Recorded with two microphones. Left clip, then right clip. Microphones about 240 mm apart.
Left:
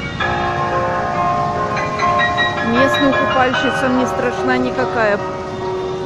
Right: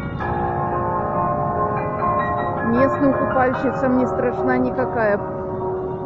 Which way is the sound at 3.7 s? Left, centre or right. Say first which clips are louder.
Left 3 dB; left.